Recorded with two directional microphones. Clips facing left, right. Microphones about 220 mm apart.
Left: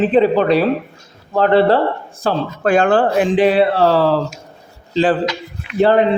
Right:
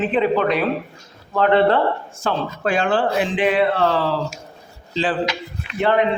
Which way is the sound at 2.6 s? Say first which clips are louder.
Left 6 dB; 45° left (ahead or behind).